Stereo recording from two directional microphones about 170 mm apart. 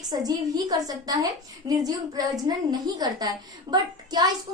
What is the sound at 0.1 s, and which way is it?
A woman's voice, 25° right (ahead or behind).